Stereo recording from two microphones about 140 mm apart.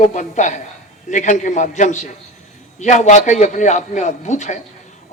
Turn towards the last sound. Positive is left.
turn(degrees=60)  # may be behind; listen again after turning